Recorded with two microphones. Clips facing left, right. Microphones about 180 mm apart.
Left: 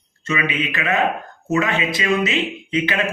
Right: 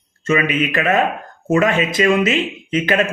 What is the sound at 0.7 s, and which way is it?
Speech, 45° right (ahead or behind).